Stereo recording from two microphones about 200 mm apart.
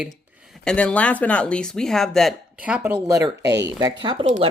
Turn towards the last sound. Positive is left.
turn(degrees=-35)  # may be behind; listen again after turning